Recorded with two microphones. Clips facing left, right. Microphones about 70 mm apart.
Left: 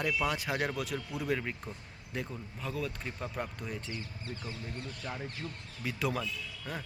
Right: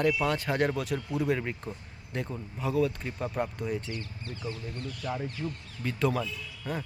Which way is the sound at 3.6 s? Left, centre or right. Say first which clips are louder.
Right 7 dB; centre.